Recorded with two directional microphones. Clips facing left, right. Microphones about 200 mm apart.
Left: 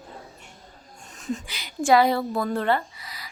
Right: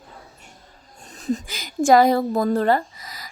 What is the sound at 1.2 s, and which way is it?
Speech, 35° right (ahead or behind).